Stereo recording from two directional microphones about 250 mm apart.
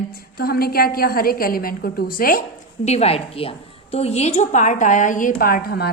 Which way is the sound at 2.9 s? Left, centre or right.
Left.